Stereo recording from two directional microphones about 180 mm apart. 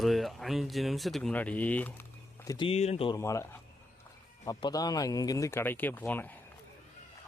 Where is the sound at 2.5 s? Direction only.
30° left (ahead or behind).